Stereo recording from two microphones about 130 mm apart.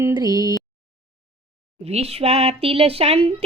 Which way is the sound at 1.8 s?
55° right (ahead or behind).